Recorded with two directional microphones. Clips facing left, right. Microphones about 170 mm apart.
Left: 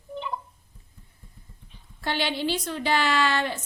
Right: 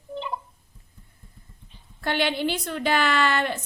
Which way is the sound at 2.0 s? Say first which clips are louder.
Right 3 dB; 55° right (ahead or behind).